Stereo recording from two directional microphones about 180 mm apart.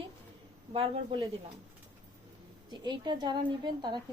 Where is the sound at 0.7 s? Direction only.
30° right (ahead or behind).